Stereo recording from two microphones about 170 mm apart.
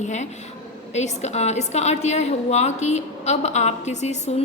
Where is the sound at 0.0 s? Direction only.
45° left (ahead or behind).